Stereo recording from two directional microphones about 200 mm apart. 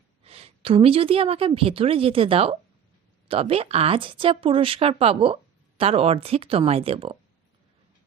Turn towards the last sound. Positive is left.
turn(degrees=-30)  # may be behind; listen again after turning